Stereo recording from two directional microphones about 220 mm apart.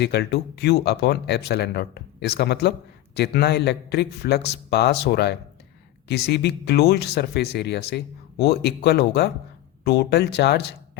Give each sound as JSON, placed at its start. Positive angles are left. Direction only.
{"t": 0.0, "sound": "speech", "side_deg": 50}